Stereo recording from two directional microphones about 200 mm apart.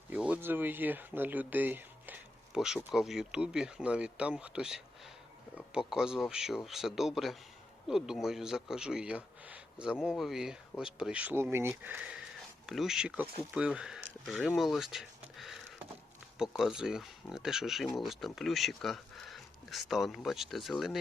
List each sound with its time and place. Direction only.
0.1 s speech: 5° right (ahead or behind)